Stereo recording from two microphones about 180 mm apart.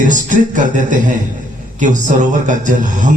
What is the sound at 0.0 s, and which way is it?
A man's voice, 45° right (ahead or behind).